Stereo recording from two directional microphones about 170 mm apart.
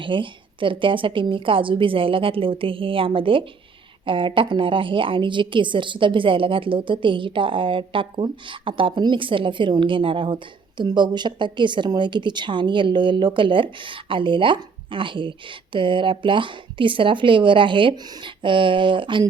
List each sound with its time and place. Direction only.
0.0 s a woman's voice: 30° right (ahead or behind)